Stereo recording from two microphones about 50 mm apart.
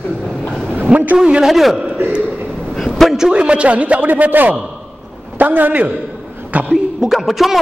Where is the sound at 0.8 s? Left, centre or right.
Right.